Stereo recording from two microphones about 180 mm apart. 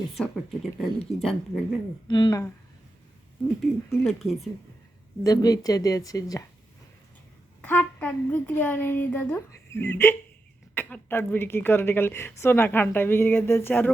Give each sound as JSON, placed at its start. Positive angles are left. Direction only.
{"t": 0.1, "sound": "speech", "side_deg": 0}
{"t": 2.0, "sound": "speech", "side_deg": 25}
{"t": 3.6, "sound": "speech", "side_deg": 0}
{"t": 5.2, "sound": "speech", "side_deg": 20}
{"t": 7.6, "sound": "a woman's voice", "side_deg": 10}